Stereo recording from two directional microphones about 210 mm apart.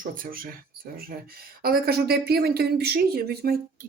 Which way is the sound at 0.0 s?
40° right (ahead or behind).